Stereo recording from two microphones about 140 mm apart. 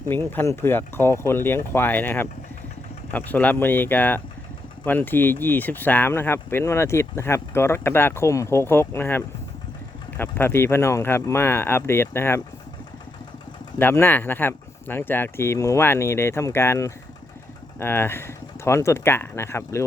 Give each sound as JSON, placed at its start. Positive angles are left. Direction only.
{"t": 0.1, "sound": "speech", "side_deg": 15}
{"t": 13.7, "sound": "speech", "side_deg": 15}